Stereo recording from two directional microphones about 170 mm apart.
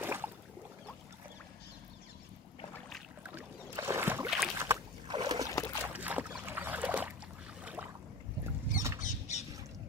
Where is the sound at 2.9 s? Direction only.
10° right (ahead or behind).